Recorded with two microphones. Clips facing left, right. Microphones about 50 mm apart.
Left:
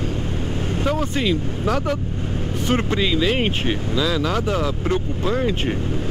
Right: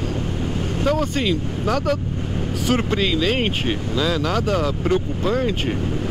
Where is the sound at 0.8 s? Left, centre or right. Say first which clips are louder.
Right 1 dB; centre.